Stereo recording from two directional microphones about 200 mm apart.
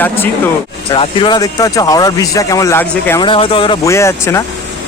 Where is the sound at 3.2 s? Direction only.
25° left (ahead or behind).